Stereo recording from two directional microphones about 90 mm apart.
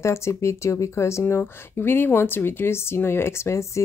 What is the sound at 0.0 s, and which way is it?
Speech, 30° left (ahead or behind).